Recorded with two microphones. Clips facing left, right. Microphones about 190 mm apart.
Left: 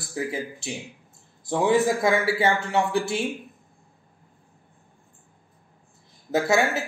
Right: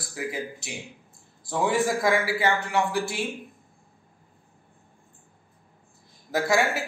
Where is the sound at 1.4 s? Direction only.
20° left (ahead or behind).